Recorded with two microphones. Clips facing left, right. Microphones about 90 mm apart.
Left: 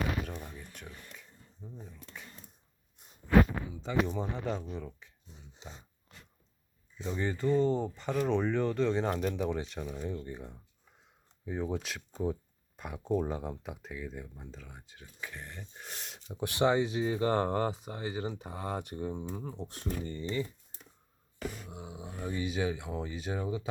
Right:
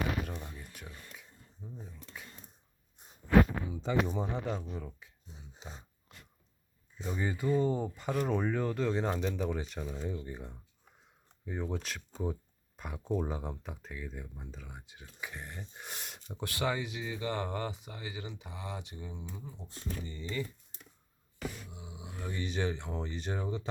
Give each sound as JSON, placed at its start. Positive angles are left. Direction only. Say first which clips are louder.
{"t": 0.3, "sound": "speech", "louder": "left 1 dB", "side_deg": -5}
{"t": 4.0, "sound": "speech", "louder": "even", "side_deg": -10}
{"t": 7.0, "sound": "speech", "louder": "left 2 dB", "side_deg": -5}
{"t": 16.4, "sound": "speech", "louder": "left 7 dB", "side_deg": 25}
{"t": 21.7, "sound": "speech", "louder": "left 5 dB", "side_deg": 55}
{"t": 21.9, "sound": "speech", "louder": "left 4 dB", "side_deg": 35}
{"t": 22.2, "sound": "speech", "louder": "left 2 dB", "side_deg": 15}